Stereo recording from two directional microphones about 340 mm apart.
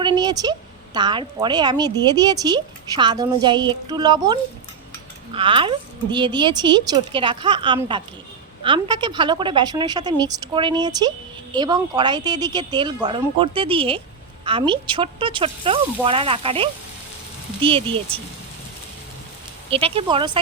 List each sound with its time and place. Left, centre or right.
0.0 s speech: centre
19.7 s speech: centre